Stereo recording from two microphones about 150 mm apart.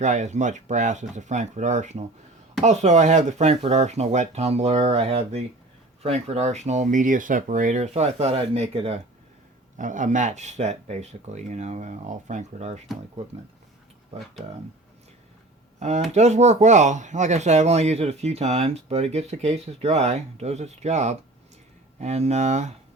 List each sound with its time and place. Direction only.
0.0 s speech: 50° right (ahead or behind)
9.7 s speech: 60° right (ahead or behind)
14.4 s speech: 45° right (ahead or behind)
15.8 s speech: 50° right (ahead or behind)